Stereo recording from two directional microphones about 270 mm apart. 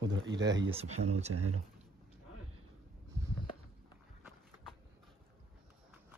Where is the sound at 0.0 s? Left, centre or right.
Right.